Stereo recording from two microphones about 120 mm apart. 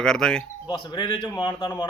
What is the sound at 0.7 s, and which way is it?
Speech, 40° left (ahead or behind).